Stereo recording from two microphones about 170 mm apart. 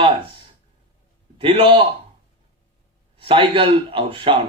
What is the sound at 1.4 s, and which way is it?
Speech, 35° right (ahead or behind).